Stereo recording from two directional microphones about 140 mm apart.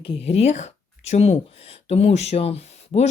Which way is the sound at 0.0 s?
50° left (ahead or behind).